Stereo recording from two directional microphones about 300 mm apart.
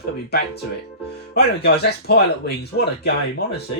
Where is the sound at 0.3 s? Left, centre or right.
Left.